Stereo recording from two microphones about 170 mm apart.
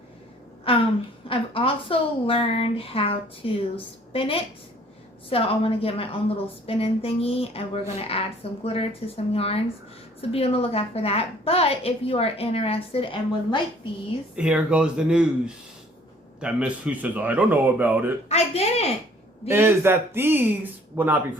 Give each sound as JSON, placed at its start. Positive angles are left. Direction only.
{"t": 0.7, "sound": "a sound", "side_deg": 35}
{"t": 1.3, "sound": "a woman's voice", "side_deg": 30}
{"t": 14.3, "sound": "speech", "side_deg": -5}
{"t": 18.3, "sound": "a woman's voice", "side_deg": 40}
{"t": 19.5, "sound": "speech", "side_deg": -15}